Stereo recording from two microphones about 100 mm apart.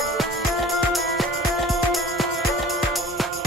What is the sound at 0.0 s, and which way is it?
Music, centre (ahead or behind).